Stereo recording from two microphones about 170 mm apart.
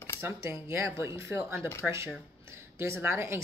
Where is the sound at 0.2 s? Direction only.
15° right (ahead or behind).